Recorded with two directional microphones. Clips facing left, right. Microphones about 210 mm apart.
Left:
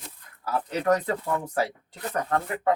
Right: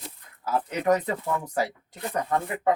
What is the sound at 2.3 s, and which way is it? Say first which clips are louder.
Speech: even; 15° right (ahead or behind).